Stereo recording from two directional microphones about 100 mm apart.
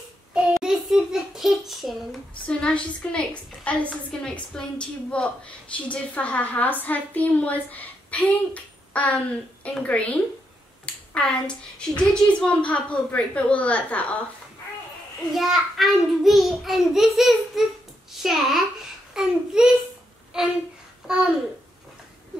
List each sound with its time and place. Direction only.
0.3 s child singing: 5° right (ahead or behind)
2.4 s a woman's voice: 10° left (ahead or behind)
15.3 s a child's voice: centre (ahead or behind)
20.3 s a sound: 5° right (ahead or behind)